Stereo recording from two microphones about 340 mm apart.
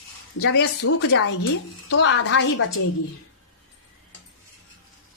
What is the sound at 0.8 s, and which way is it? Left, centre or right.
A woman's voice, left.